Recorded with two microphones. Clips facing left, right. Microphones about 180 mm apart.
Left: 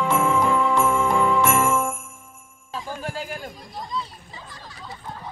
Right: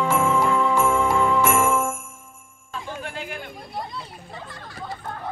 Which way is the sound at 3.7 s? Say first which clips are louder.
Left 1 dB; 60° right (ahead or behind).